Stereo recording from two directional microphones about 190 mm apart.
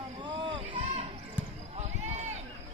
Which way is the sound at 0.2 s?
25° right (ahead or behind).